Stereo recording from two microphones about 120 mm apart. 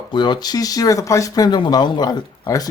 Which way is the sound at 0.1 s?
40° left (ahead or behind).